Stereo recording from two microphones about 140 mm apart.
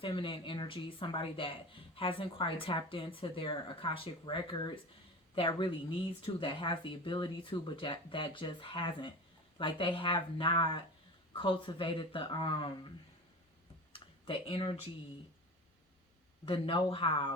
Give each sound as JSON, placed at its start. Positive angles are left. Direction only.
{"t": 0.0, "sound": "speech", "side_deg": 40}
{"t": 13.9, "sound": "a sound", "side_deg": 40}
{"t": 16.5, "sound": "speech", "side_deg": 40}